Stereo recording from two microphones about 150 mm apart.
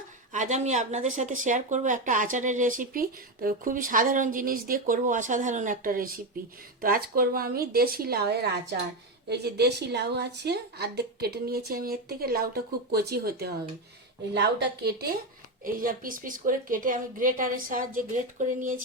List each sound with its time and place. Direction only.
0.3 s a woman's voice: 50° right (ahead or behind); by 13.5 s 90° right
14.8 s speech: 90° right
15.6 s a woman's voice: 65° right (ahead or behind)